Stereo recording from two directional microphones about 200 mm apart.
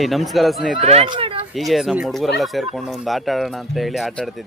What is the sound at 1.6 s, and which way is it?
Speech, centre (ahead or behind).